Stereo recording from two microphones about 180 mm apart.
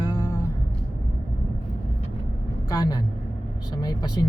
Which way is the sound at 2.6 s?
20° left (ahead or behind).